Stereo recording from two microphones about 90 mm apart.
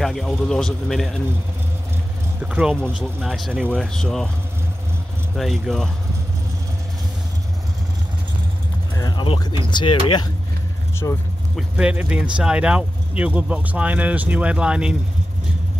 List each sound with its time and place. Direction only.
0.0 s a man's voice: 5° left (ahead or behind)
2.4 s speech: 15° right (ahead or behind)
3.0 s a man's voice: centre (ahead or behind)
5.3 s a man's voice: centre (ahead or behind)
9.1 s a sound: 70° left (ahead or behind)
9.7 s speech: 65° left (ahead or behind)
11.0 s speech: 30° left (ahead or behind)
11.7 s speech: 15° right (ahead or behind)